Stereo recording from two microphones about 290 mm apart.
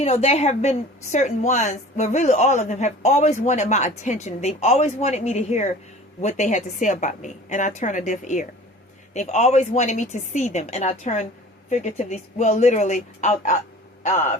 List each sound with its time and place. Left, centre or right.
0.0 s a woman's voice: left